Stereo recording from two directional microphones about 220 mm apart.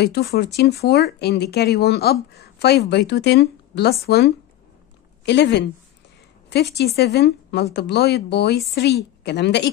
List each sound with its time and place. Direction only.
0.0 s speech: 45° left (ahead or behind)